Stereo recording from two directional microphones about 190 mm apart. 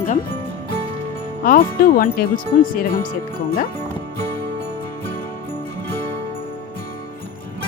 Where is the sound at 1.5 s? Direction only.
50° left (ahead or behind).